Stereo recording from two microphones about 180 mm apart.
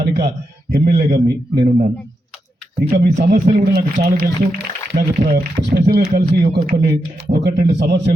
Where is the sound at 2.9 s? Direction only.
55° right (ahead or behind); by 8.1 s 70° right (ahead or behind).